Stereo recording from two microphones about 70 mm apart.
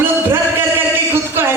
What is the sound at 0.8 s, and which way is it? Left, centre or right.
Music, right.